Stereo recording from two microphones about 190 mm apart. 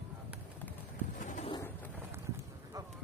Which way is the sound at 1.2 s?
40° left (ahead or behind).